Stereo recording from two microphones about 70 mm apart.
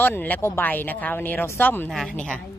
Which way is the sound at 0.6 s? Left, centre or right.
Left.